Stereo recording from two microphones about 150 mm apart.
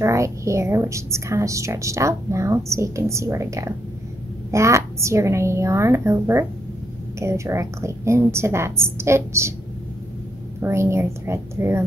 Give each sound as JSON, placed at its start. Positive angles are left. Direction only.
{"t": 0.0, "sound": "a woman's voice", "side_deg": -20}
{"t": 10.6, "sound": "a woman's voice", "side_deg": -20}